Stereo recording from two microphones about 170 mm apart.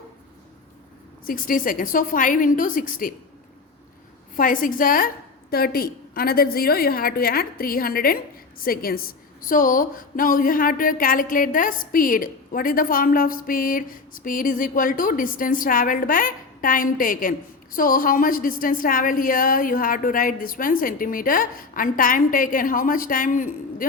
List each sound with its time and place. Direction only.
1.3 s a woman's voice: 55° left (ahead or behind)
4.4 s a woman's voice: 55° left (ahead or behind)